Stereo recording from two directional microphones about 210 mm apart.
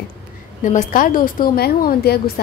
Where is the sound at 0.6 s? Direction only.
35° left (ahead or behind).